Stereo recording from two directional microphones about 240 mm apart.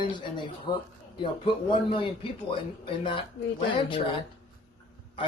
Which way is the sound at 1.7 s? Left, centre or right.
Left.